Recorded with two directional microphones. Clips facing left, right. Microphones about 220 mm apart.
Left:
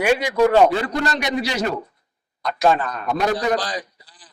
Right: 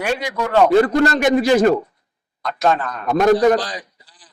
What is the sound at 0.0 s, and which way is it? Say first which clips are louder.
Speech: left 5 dB; 5° left (ahead or behind).